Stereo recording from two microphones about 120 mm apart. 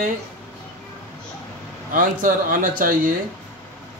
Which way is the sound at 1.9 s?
90° right.